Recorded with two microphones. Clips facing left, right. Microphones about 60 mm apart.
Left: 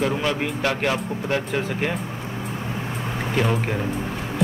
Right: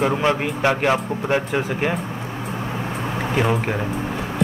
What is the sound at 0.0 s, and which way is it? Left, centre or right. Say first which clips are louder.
A man's voice: right 4 dB; right.